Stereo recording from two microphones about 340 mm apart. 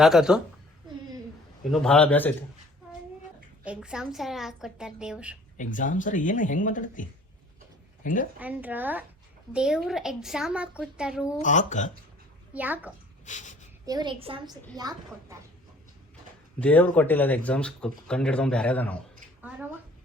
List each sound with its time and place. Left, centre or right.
0.0 s speech: centre
1.7 s speech: centre
3.6 s speech: centre
5.5 s a woman's voice: left
8.4 s speech: centre
11.3 s speech: left
12.5 s speech: centre
13.2 s speech: left
13.8 s a woman's voice: centre
16.6 s speech: centre